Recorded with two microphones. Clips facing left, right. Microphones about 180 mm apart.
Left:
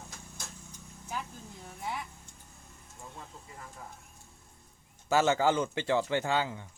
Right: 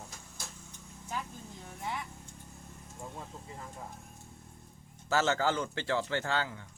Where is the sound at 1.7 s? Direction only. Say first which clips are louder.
Left 1 dB; 5° left (ahead or behind).